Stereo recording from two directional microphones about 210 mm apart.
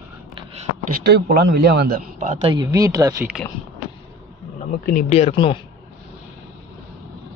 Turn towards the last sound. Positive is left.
turn(degrees=25)  # may be behind; listen again after turning